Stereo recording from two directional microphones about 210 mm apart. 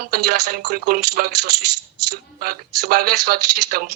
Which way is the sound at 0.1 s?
45° right (ahead or behind).